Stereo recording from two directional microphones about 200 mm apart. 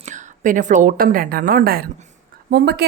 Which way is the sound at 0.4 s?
40° right (ahead or behind).